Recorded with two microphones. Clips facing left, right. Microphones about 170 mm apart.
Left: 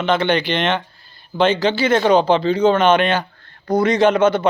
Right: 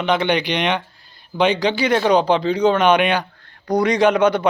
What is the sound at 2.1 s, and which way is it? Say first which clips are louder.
A man's voice: left 2 dB; 10° right (ahead or behind).